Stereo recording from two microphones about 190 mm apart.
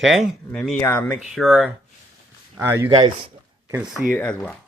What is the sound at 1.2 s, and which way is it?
Speech, centre (ahead or behind).